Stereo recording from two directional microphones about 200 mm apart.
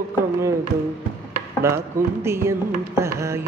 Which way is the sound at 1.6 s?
15° right (ahead or behind).